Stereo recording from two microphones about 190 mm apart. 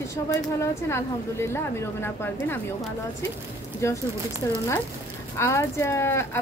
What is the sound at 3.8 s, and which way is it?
Speech, 15° left (ahead or behind).